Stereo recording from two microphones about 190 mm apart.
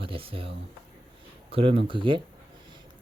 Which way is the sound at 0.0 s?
30° right (ahead or behind).